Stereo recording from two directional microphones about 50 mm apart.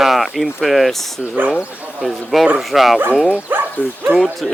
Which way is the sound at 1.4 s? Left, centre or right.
Right.